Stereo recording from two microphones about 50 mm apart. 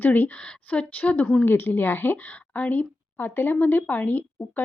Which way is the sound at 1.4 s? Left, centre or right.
Left.